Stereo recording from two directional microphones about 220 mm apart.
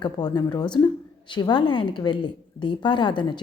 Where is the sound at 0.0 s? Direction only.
20° left (ahead or behind).